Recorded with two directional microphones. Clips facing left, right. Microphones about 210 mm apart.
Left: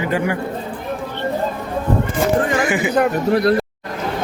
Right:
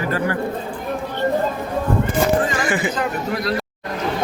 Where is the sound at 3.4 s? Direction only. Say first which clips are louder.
Left 7 dB; 50° left (ahead or behind).